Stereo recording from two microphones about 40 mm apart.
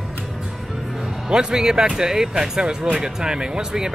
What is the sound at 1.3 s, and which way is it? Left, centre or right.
Speech, centre.